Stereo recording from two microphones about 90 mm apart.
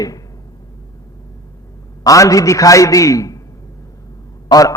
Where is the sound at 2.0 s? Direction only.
40° left (ahead or behind).